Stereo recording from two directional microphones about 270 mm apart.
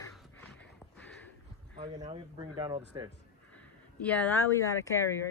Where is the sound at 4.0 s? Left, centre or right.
Centre.